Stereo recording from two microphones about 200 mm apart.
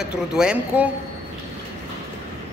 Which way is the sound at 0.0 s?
5° right (ahead or behind).